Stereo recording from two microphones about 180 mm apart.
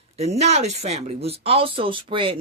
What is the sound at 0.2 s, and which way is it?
Speech, 40° right (ahead or behind).